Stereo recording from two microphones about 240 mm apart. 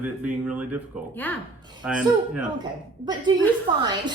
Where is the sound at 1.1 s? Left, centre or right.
Centre.